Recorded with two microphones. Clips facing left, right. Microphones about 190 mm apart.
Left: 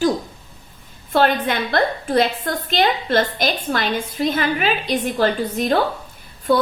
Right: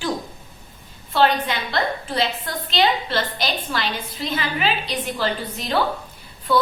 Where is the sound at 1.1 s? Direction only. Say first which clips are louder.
Left 2 dB; 50° left (ahead or behind).